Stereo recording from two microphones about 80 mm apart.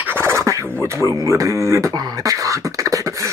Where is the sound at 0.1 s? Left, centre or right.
Right.